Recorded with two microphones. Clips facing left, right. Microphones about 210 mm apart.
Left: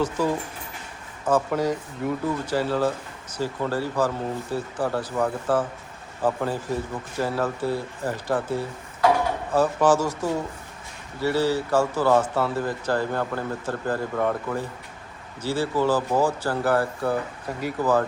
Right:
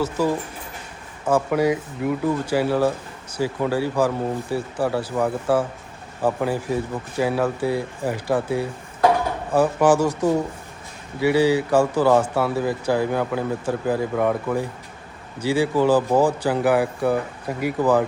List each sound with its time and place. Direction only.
0.0 s speech: 10° right (ahead or behind)